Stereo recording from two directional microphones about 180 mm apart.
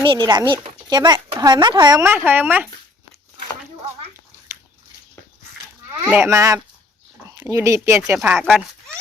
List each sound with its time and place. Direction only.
0.0 s speech: 25° right (ahead or behind); by 2.6 s 10° right (ahead or behind)
4.5 s biting: 15° right (ahead or behind)
6.1 s speech: 15° right (ahead or behind)